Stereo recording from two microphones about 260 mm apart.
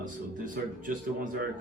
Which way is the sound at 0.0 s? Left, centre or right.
Right.